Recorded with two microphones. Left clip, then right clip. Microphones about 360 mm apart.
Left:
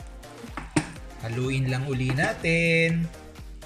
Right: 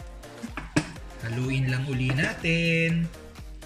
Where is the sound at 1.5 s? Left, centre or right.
Centre.